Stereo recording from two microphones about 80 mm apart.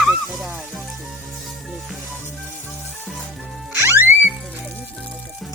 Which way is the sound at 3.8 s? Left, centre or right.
Right.